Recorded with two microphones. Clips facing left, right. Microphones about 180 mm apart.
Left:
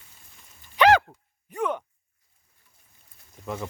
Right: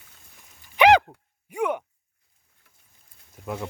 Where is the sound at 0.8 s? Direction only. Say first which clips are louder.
Right 2 dB; 15° right (ahead or behind).